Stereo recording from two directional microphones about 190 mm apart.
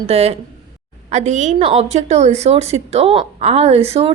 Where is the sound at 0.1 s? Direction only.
35° right (ahead or behind).